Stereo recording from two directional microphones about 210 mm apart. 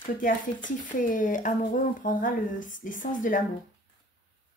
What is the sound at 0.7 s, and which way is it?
Speech, 40° left (ahead or behind).